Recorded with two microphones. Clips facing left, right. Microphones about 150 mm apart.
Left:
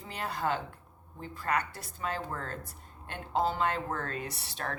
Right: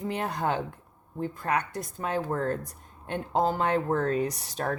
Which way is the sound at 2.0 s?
45° right (ahead or behind).